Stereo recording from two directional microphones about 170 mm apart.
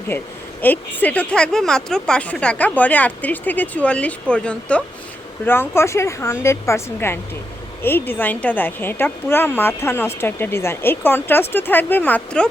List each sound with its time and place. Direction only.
0.1 s a woman's voice: 15° left (ahead or behind)